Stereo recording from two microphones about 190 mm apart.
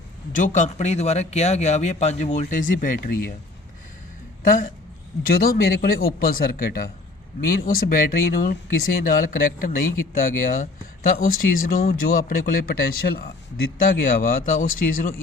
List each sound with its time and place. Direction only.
0.3 s speech: 40° left (ahead or behind)
4.4 s speech: 45° left (ahead or behind)